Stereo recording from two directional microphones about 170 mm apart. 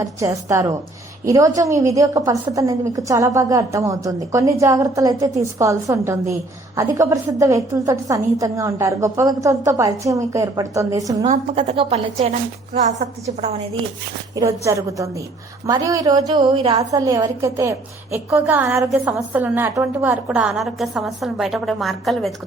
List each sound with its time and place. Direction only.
0.0 s a woman's voice: 15° right (ahead or behind)
11.5 s a woman's voice: 35° right (ahead or behind)
14.3 s a woman's voice: 20° right (ahead or behind); by 22.3 s centre (ahead or behind)